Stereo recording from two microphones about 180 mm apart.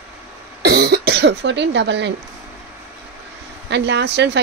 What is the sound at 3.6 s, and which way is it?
Speech, 75° right (ahead or behind).